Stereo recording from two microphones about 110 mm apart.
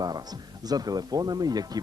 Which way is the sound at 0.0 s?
35° right (ahead or behind).